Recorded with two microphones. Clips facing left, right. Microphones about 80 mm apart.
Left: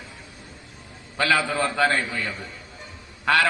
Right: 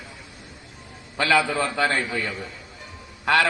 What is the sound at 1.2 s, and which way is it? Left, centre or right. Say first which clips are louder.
Speech: right 1 dB; right.